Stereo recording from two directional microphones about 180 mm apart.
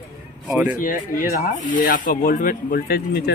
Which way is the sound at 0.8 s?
50° left (ahead or behind).